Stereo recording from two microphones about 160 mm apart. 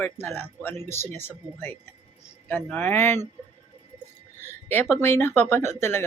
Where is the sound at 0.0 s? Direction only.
15° left (ahead or behind).